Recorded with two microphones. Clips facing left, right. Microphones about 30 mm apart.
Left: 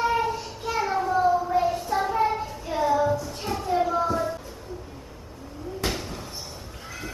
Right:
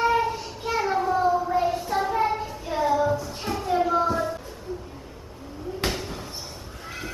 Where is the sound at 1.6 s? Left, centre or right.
Centre.